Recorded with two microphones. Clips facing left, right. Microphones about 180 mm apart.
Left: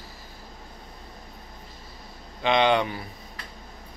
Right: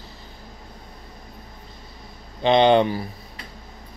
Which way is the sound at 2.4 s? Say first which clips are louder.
Right 6 dB; 30° right (ahead or behind).